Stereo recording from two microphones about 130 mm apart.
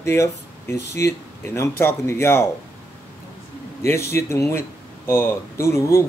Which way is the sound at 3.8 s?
20° left (ahead or behind).